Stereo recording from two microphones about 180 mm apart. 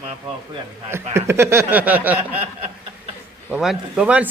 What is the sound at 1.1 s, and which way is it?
Speech, 15° right (ahead or behind).